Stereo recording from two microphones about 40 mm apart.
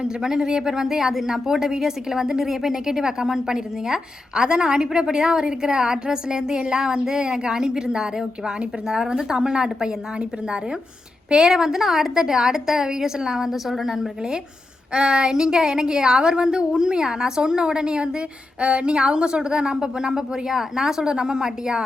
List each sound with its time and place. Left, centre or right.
0.0 s a woman's voice: centre
14.9 s a woman's voice: right